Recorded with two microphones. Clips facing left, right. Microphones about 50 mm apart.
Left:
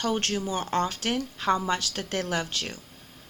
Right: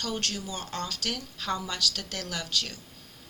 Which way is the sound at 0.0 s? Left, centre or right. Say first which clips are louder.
Left 6 dB; left.